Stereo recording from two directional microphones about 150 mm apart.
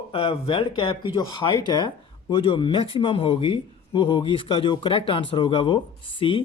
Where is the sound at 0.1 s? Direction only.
40° left (ahead or behind).